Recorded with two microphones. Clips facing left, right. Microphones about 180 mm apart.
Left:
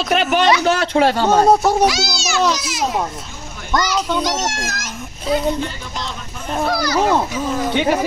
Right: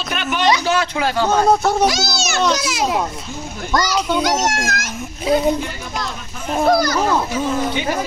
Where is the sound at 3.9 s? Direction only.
5° right (ahead or behind).